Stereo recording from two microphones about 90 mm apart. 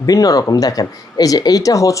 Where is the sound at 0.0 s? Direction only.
40° left (ahead or behind).